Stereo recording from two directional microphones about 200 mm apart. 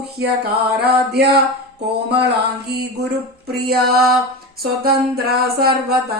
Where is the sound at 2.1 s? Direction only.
55° right (ahead or behind).